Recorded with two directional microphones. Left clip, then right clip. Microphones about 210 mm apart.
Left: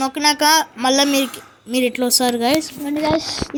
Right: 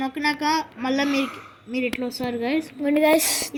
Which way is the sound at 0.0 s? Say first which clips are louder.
Left 8 dB; 50° left (ahead or behind).